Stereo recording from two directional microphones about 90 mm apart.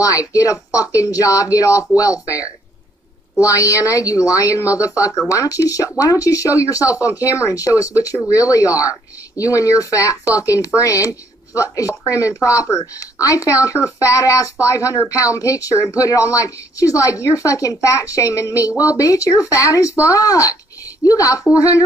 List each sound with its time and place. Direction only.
0.0 s speech: 40° left (ahead or behind)
3.3 s speech: 35° left (ahead or behind)
18.7 s speech: 15° right (ahead or behind)
18.9 s speech: 40° left (ahead or behind)